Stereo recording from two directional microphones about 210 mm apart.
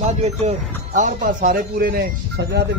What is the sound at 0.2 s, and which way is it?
Speech, 35° right (ahead or behind).